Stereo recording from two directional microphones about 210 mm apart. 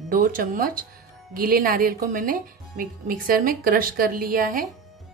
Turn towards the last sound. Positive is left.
turn(degrees=-40)  # may be behind; listen again after turning